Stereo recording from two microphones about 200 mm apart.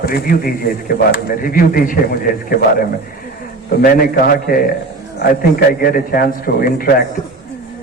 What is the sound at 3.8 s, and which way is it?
A man's voice, 45° left (ahead or behind).